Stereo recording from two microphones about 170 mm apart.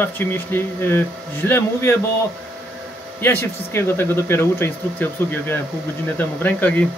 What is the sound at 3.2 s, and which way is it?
Speech, 15° left (ahead or behind).